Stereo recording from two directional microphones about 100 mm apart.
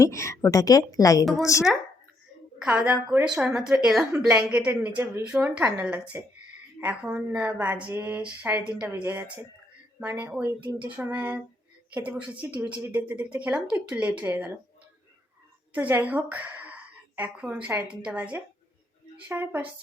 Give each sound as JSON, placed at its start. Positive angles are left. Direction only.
{"t": 0.0, "sound": "a woman's voice", "side_deg": 30}
{"t": 2.6, "sound": "a woman's voice", "side_deg": -15}
{"t": 7.0, "sound": "a woman's voice", "side_deg": -10}
{"t": 15.7, "sound": "a woman's voice", "side_deg": -15}